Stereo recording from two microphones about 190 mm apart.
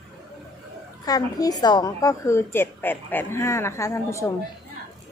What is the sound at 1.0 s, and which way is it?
A woman's voice, 20° left (ahead or behind).